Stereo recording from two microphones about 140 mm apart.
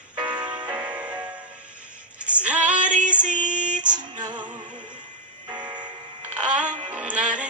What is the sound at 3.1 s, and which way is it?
Female singing, 10° right (ahead or behind).